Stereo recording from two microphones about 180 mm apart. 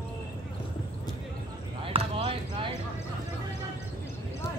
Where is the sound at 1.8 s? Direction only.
30° right (ahead or behind).